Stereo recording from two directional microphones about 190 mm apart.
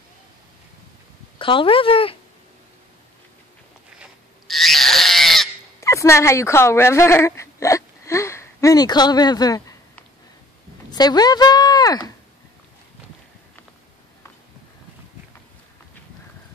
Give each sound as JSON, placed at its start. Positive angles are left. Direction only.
{"t": 1.4, "sound": "speech", "side_deg": 25}
{"t": 4.0, "sound": "goat", "side_deg": 0}
{"t": 5.8, "sound": "speech", "side_deg": 15}
{"t": 10.9, "sound": "speech", "side_deg": 20}